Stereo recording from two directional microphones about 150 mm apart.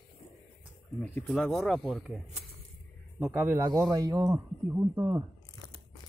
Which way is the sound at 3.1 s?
15° right (ahead or behind).